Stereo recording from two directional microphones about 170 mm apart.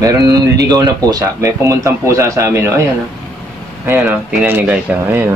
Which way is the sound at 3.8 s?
10° right (ahead or behind).